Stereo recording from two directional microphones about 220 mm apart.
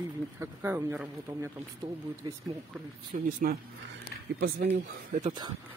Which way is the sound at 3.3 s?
40° right (ahead or behind).